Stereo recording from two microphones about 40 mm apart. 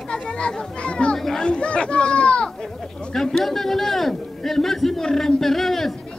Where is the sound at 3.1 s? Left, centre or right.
Centre.